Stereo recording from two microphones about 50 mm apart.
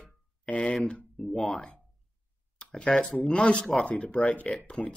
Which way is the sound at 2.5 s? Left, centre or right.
Centre.